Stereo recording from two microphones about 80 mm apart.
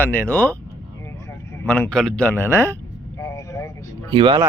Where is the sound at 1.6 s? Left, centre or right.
Left.